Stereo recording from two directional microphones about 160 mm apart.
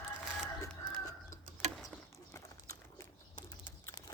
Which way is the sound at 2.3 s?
20° left (ahead or behind).